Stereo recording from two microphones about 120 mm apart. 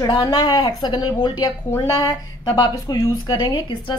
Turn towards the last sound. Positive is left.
turn(degrees=40)  # may be behind; listen again after turning